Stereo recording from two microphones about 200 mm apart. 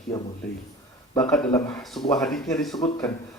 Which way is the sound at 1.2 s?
5° left (ahead or behind).